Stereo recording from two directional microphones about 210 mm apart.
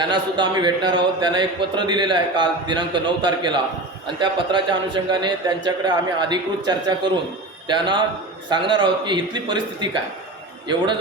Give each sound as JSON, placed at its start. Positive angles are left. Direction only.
{"t": 0.0, "sound": "speech", "side_deg": -20}